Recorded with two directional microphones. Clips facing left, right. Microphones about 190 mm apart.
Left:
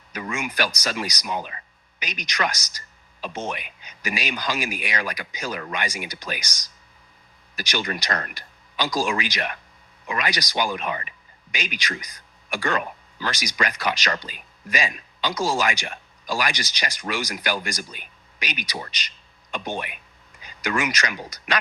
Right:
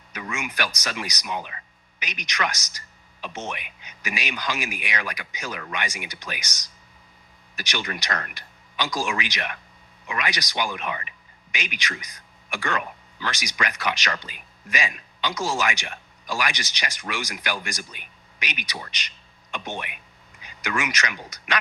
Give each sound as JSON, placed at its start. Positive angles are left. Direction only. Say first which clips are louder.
{"t": 0.1, "sound": "speech", "louder": "left 3 dB", "side_deg": 35}
{"t": 7.5, "sound": "a man's voice", "louder": "left 3 dB", "side_deg": 35}